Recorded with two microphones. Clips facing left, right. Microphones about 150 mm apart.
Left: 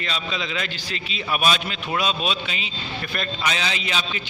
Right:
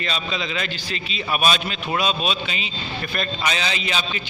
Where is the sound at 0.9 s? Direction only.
15° left (ahead or behind).